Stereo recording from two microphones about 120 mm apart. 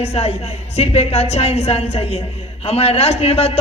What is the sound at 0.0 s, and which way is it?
A man's voice, 60° left (ahead or behind).